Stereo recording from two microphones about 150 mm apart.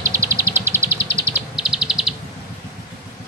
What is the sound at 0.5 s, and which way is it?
Bird vocalization, 15° right (ahead or behind).